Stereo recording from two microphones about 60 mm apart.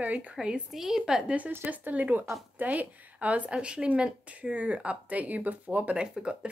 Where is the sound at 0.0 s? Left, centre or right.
Right.